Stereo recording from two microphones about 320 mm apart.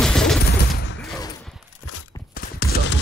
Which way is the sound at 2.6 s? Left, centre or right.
Left.